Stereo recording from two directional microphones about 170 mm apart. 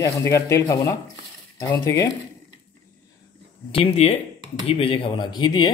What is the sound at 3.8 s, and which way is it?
Speech, 40° left (ahead or behind).